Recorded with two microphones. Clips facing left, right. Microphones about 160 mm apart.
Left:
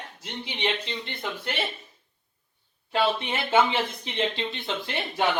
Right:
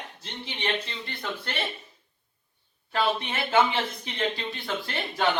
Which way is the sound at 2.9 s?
25° left (ahead or behind).